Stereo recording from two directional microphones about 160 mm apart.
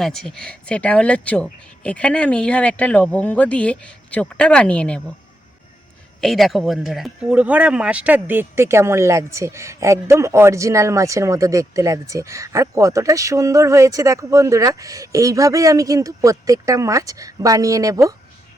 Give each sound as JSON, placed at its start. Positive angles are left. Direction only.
{"t": 0.0, "sound": "speech", "side_deg": 0}
{"t": 6.2, "sound": "speech", "side_deg": 0}